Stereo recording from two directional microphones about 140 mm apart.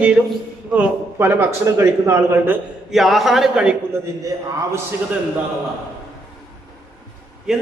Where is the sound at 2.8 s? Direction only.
Centre (ahead or behind).